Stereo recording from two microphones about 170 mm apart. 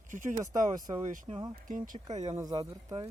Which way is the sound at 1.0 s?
50° right (ahead or behind).